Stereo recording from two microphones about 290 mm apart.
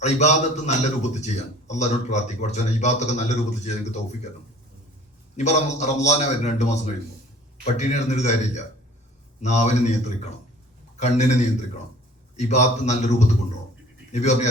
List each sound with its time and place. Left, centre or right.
0.0 s a man's voice: left
5.4 s a man's voice: left